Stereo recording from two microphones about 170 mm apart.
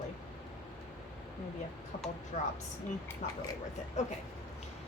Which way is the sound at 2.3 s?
45° left (ahead or behind).